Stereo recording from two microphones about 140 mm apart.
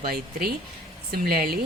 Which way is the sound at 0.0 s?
90° right.